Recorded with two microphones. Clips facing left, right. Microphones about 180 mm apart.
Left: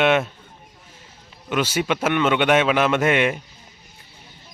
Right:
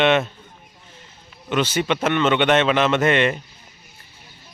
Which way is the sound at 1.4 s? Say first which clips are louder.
Right 1 dB; 10° left (ahead or behind).